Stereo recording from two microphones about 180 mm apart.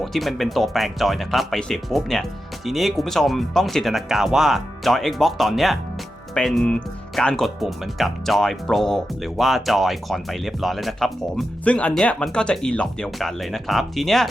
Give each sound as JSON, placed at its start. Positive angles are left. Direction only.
{"t": 0.0, "sound": "speech", "side_deg": 0}